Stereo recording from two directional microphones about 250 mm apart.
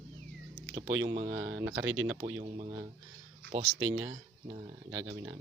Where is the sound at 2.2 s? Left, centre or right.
Centre.